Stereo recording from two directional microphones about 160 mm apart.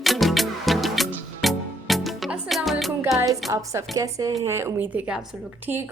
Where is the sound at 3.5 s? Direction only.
20° right (ahead or behind).